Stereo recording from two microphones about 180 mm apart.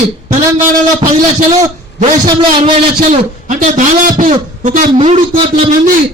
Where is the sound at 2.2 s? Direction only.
25° right (ahead or behind).